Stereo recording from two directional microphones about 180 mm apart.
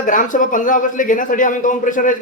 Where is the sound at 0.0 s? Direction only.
45° left (ahead or behind).